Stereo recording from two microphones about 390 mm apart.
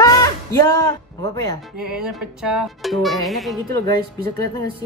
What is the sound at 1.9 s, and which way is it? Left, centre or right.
Speech, centre.